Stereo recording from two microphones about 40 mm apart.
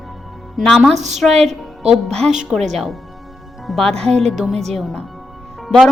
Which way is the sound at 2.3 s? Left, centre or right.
Centre.